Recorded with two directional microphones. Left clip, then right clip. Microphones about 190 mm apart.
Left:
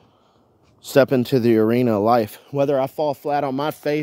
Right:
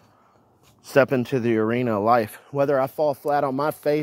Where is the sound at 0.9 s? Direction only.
35° left (ahead or behind).